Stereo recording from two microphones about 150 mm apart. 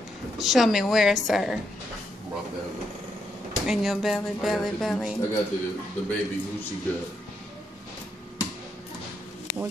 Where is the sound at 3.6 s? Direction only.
Centre (ahead or behind).